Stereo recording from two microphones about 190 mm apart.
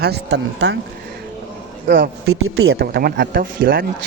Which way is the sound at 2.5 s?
90° right.